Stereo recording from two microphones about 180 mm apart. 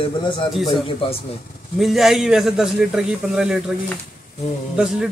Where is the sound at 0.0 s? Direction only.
30° left (ahead or behind).